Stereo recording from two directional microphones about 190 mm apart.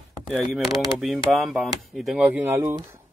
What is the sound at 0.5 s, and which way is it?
Speech, centre (ahead or behind).